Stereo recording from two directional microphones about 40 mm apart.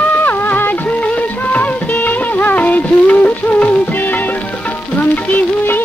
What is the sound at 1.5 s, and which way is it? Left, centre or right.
Music of bollywood, left.